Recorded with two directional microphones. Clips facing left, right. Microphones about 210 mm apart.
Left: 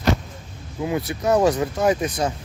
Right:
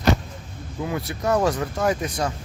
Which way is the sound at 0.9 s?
20° left (ahead or behind).